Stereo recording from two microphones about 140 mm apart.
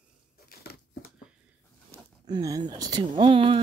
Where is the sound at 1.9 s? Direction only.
25° right (ahead or behind).